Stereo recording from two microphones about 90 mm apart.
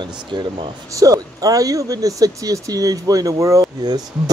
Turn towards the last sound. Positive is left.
turn(degrees=-45)  # may be behind; listen again after turning